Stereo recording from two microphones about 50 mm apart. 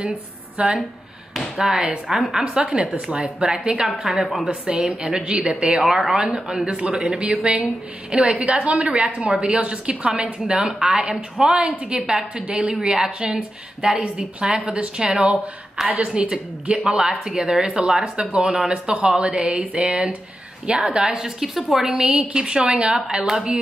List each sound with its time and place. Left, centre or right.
0.6 s a woman's voice: right
5.9 s a woman's voice: centre
15.8 s speech: centre
16.2 s a woman's voice: right
21.0 s speech: centre